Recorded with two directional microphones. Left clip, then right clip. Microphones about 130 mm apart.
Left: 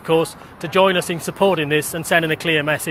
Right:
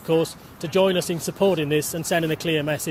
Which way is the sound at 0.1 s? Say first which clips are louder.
Left 4 dB; 45° right (ahead or behind).